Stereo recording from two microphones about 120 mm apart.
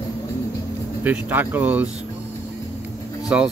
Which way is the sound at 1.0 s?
15° right (ahead or behind).